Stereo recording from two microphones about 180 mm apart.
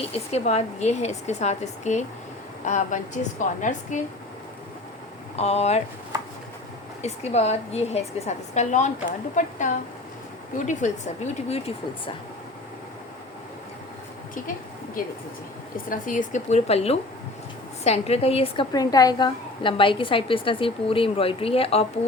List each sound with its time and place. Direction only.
0.0 s a woman's voice: 35° left (ahead or behind)
5.4 s a woman's voice: 35° left (ahead or behind)
7.0 s a woman's voice: 35° left (ahead or behind)
15.9 s a woman's voice: 45° left (ahead or behind)